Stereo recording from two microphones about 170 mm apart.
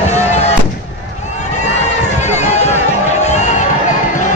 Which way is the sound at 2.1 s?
45° left (ahead or behind).